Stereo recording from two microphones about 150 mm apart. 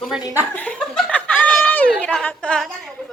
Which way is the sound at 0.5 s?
10° left (ahead or behind).